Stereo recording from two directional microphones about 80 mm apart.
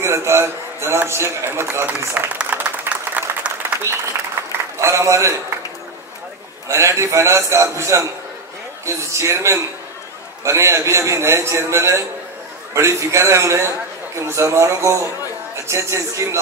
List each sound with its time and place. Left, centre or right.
0.0 s a man's voice: right
2.1 s applause: centre
4.7 s a man's voice: right
6.7 s a man's voice: right